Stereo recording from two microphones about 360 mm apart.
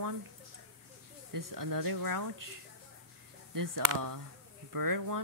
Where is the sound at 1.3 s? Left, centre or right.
Right.